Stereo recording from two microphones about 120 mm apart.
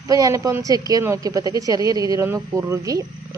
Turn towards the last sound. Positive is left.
turn(degrees=-25)  # may be behind; listen again after turning